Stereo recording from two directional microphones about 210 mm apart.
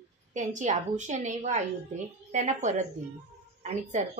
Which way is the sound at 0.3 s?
35° right (ahead or behind).